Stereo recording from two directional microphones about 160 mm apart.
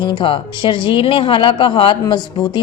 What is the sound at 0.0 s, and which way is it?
Speech, 30° left (ahead or behind).